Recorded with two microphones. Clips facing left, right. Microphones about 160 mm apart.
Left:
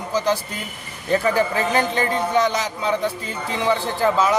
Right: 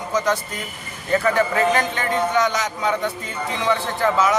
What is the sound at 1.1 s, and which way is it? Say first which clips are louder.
A man's voice: even; 30° left (ahead or behind).